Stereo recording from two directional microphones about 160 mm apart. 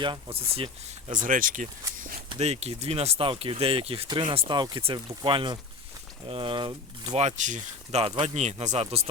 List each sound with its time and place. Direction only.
0.0 s speech: 35° right (ahead or behind)
1.2 s speech: 55° right (ahead or behind)
2.4 s speech: 40° right (ahead or behind)
7.1 s speech: 45° right (ahead or behind)